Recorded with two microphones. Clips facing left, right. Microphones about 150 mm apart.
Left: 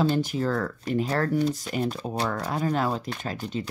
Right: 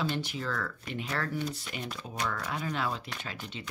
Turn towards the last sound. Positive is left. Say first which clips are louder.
# left 10 dB
turn(degrees=40)  # may be behind; listen again after turning